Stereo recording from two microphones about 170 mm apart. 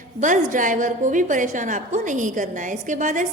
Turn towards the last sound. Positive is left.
turn(degrees=-50)  # may be behind; listen again after turning